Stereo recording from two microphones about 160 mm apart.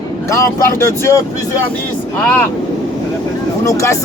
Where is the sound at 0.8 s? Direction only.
15° left (ahead or behind).